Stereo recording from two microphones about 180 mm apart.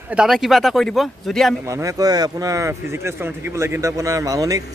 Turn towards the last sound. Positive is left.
turn(degrees=-20)  # may be behind; listen again after turning